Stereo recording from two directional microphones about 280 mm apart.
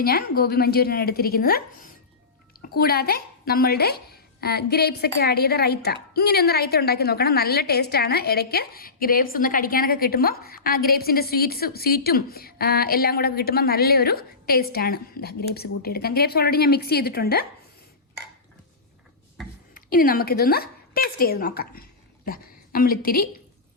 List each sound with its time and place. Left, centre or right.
0.0 s a child's voice: left
19.7 s a woman's voice: left